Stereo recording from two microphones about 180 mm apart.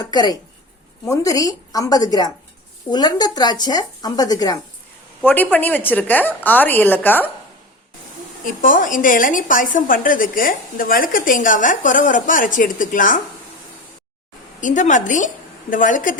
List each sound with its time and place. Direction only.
0.1 s speech: 25° left (ahead or behind)
5.2 s a woman's voice: 10° left (ahead or behind)
8.4 s a woman's voice: 50° left (ahead or behind)
14.6 s a woman's voice: 45° left (ahead or behind)